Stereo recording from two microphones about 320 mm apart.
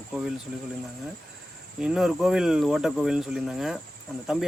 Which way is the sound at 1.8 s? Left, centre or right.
Centre.